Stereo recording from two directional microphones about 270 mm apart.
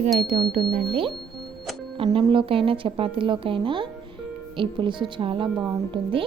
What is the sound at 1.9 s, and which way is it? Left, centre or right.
A woman's voice, centre.